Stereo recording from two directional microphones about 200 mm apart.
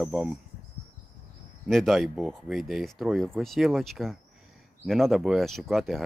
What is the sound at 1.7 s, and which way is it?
Speech, centre (ahead or behind).